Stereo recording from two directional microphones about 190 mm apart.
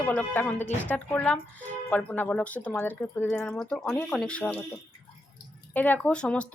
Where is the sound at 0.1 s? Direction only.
10° left (ahead or behind).